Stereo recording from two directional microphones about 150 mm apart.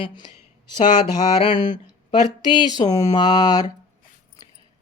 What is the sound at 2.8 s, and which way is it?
Speech, 35° left (ahead or behind).